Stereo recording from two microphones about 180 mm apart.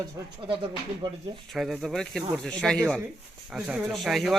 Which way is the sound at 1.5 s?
Centre (ahead or behind).